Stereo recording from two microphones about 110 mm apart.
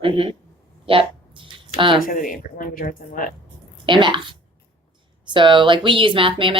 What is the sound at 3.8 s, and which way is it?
A woman's voice, 45° right (ahead or behind).